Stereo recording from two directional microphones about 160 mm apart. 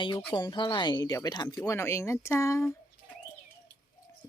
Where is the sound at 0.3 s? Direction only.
25° left (ahead or behind).